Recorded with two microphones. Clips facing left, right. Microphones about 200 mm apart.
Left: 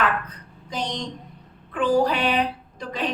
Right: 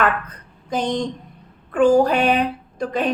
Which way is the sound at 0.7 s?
50° right (ahead or behind).